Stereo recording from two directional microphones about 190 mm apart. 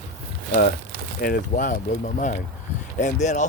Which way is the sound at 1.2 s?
50° left (ahead or behind).